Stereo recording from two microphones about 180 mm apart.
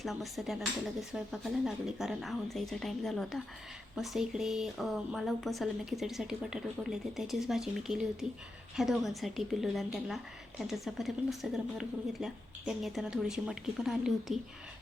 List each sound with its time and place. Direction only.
0.0 s a woman's voice: centre (ahead or behind)